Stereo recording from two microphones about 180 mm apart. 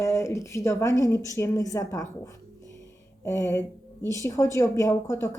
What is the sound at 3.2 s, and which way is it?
Speech, 15° left (ahead or behind).